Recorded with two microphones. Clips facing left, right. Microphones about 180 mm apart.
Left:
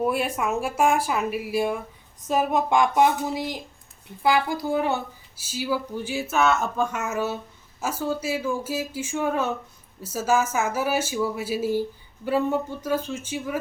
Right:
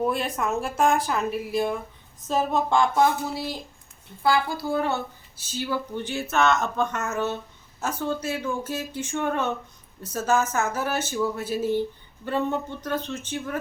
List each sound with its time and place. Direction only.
0.0 s speech: 10° left (ahead or behind)